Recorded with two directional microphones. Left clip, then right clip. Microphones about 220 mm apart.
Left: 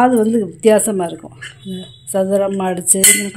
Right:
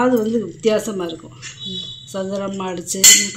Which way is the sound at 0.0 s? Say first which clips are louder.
Left 4 dB; 50° left (ahead or behind).